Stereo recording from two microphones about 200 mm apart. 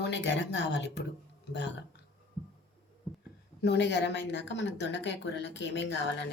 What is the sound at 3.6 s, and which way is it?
Speech, 60° left (ahead or behind).